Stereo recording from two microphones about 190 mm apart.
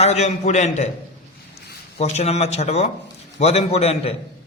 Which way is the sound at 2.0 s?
35° left (ahead or behind).